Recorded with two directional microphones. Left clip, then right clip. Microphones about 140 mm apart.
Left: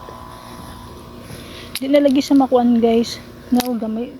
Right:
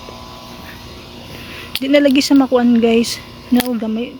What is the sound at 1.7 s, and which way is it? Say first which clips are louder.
Speech: right 2 dB; 20° right (ahead or behind).